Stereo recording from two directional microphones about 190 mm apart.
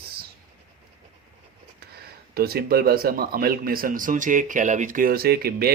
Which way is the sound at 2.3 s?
55° right (ahead or behind).